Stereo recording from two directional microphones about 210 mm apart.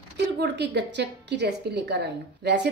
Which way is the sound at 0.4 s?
55° right (ahead or behind).